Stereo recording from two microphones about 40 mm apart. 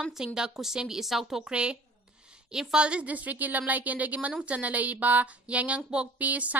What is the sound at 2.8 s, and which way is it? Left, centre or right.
A woman's voice, right.